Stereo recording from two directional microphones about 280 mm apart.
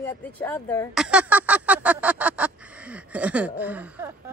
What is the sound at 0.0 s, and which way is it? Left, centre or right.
Speech, centre.